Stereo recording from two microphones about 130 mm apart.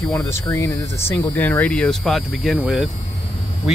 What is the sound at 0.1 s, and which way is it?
Speech, 20° left (ahead or behind).